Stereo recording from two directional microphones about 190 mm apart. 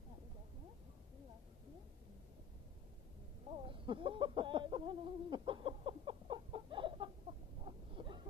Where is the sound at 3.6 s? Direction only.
25° right (ahead or behind).